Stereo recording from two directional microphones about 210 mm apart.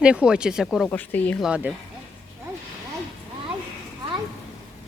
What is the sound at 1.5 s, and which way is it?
Speech, 5° right (ahead or behind).